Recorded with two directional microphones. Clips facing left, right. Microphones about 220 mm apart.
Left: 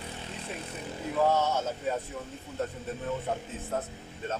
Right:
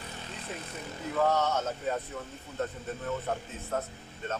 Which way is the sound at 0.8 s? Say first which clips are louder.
Left 1 dB; 10° left (ahead or behind).